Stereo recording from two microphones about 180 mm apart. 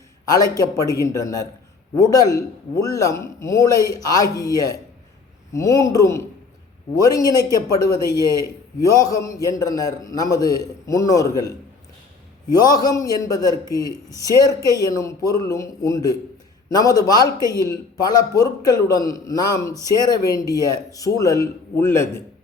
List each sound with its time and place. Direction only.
0.6 s a man's voice: 20° left (ahead or behind)
8.9 s a man's voice: 20° left (ahead or behind)